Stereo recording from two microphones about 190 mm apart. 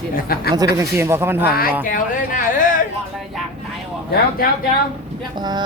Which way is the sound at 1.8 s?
45° left (ahead or behind).